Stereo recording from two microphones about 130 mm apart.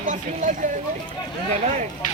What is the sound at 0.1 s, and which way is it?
Speech, 75° right (ahead or behind).